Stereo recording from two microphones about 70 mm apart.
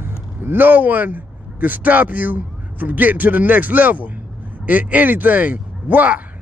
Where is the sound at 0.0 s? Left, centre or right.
Right.